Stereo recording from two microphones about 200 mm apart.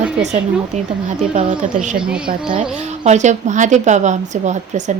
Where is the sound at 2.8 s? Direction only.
35° right (ahead or behind).